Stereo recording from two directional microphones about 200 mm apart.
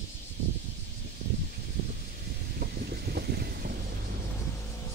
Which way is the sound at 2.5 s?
50° right (ahead or behind).